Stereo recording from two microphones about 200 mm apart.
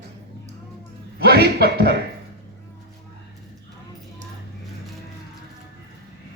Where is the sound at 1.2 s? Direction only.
55° right (ahead or behind).